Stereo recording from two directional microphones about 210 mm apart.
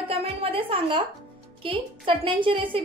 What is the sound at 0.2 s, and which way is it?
A woman's voice, 25° right (ahead or behind).